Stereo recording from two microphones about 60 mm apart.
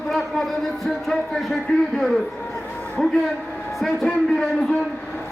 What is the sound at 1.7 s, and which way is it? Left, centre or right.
Speech, left.